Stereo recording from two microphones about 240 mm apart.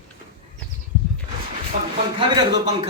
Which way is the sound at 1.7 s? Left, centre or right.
Right.